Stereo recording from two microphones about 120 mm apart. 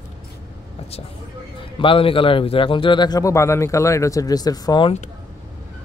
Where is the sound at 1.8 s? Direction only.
50° left (ahead or behind).